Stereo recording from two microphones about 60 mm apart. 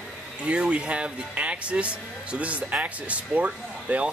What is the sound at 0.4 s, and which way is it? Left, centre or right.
Speech, centre.